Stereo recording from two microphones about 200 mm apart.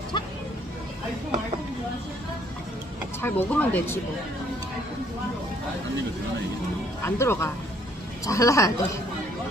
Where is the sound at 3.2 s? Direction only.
10° left (ahead or behind).